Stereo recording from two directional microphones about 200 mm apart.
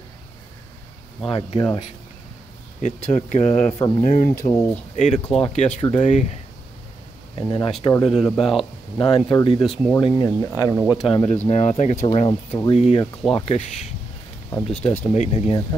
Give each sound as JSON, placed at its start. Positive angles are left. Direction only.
{"t": 1.2, "sound": "speech", "side_deg": 25}
{"t": 2.8, "sound": "speech", "side_deg": 35}
{"t": 4.3, "sound": "speech", "side_deg": 15}
{"t": 4.9, "sound": "speech", "side_deg": 35}
{"t": 7.3, "sound": "speech", "side_deg": 25}
{"t": 8.2, "sound": "speech", "side_deg": 0}
{"t": 9.0, "sound": "speech", "side_deg": 25}
{"t": 10.8, "sound": "speech", "side_deg": -5}
{"t": 11.1, "sound": "speech", "side_deg": 30}
{"t": 14.7, "sound": "speech", "side_deg": 10}
{"t": 15.1, "sound": "speech", "side_deg": 30}